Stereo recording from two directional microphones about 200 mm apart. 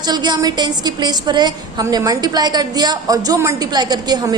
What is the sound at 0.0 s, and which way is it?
A woman's voice, 20° right (ahead or behind).